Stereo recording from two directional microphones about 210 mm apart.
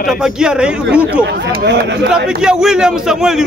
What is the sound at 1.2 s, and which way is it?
Speech, 55° right (ahead or behind).